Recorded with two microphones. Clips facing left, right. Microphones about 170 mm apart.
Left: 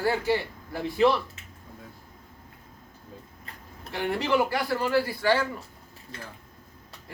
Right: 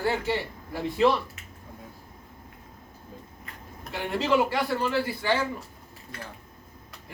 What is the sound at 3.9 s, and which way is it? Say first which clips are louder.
A man's voice: even; 20° right (ahead or behind).